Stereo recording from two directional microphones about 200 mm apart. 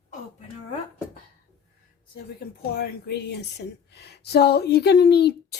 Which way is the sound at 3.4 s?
55° left (ahead or behind).